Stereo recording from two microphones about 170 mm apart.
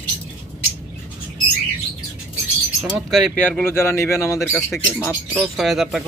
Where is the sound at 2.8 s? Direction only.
Centre (ahead or behind); by 4.3 s 15° left (ahead or behind).